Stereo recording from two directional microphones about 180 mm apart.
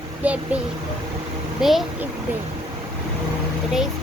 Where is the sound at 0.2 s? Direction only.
10° right (ahead or behind).